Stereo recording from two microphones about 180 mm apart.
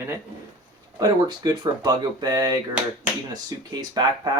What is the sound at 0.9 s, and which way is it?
Speech, 20° right (ahead or behind).